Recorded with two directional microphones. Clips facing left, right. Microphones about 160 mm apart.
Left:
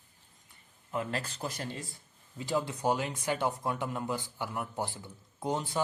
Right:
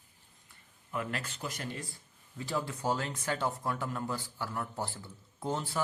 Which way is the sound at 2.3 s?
20° left (ahead or behind).